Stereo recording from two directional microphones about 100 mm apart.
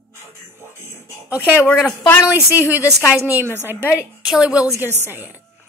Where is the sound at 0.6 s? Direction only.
25° right (ahead or behind).